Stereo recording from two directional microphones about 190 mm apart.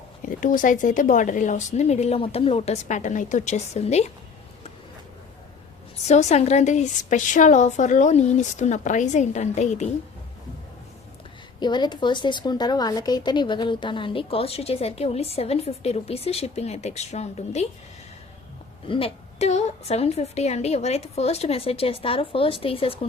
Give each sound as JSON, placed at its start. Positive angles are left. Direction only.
{"t": 0.2, "sound": "a woman's voice", "side_deg": 45}
{"t": 6.1, "sound": "a woman's voice", "side_deg": 35}
{"t": 11.6, "sound": "a woman's voice", "side_deg": 25}
{"t": 18.9, "sound": "a woman's voice", "side_deg": 30}